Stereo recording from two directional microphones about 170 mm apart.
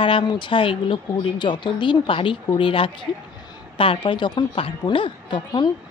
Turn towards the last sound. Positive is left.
turn(degrees=30)  # may be behind; listen again after turning